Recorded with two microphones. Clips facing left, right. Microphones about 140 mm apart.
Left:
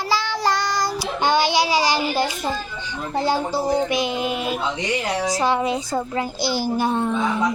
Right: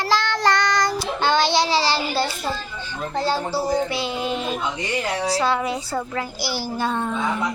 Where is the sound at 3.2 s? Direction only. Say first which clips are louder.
Left 2 dB; 15° left (ahead or behind).